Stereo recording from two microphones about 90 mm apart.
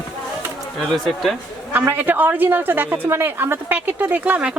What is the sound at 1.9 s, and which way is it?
A woman's voice, 20° right (ahead or behind).